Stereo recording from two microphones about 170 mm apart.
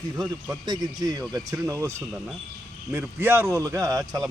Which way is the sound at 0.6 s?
25° right (ahead or behind).